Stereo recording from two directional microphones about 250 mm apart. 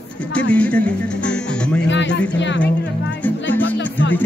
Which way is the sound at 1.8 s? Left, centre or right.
Left.